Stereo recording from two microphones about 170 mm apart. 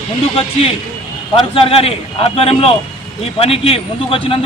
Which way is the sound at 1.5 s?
30° left (ahead or behind).